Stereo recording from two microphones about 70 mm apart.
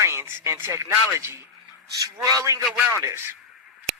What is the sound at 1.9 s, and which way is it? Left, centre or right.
Speech, right.